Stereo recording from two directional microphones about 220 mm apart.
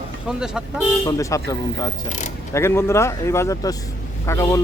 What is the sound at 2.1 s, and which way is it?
Speech, 35° left (ahead or behind).